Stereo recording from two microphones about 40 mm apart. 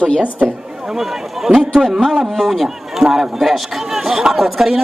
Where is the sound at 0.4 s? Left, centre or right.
Right.